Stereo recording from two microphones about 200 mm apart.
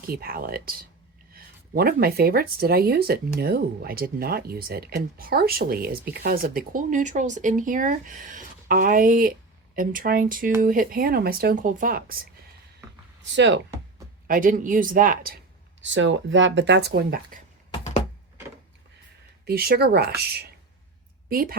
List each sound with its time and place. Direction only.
0.1 s speech: 50° right (ahead or behind)
13.3 s speech: 60° right (ahead or behind)
14.3 s speech: 40° right (ahead or behind)
15.8 s speech: 70° right (ahead or behind); by 17.4 s 50° right (ahead or behind)
19.5 s speech: 50° right (ahead or behind)
21.2 s a woman's voice: 45° right (ahead or behind)